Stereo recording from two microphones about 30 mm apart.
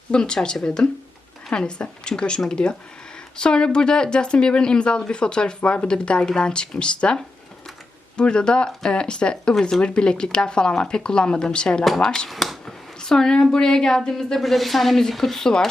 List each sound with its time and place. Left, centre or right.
0.1 s speech: left
1.5 s speech: left
12.3 s speech: centre
13.0 s speech: left
14.3 s speech: centre
15.2 s speech: centre